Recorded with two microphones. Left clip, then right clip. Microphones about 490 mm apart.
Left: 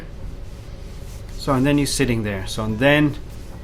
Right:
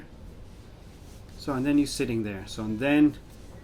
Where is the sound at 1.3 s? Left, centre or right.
Left.